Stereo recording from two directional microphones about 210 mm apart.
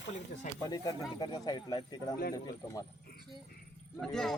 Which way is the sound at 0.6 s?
20° left (ahead or behind).